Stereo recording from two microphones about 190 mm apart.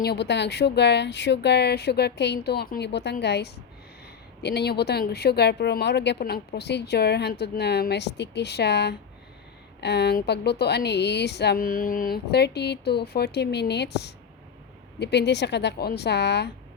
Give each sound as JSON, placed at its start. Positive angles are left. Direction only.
{"t": 0.0, "sound": "speech", "side_deg": 60}